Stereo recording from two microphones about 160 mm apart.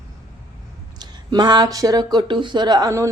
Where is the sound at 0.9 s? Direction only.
25° right (ahead or behind).